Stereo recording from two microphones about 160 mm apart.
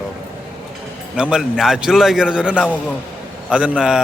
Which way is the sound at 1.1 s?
5° right (ahead or behind).